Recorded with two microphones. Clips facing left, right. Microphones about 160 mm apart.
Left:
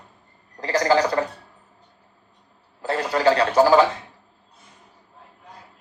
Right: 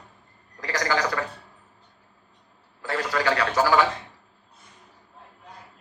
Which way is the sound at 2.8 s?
30° left (ahead or behind).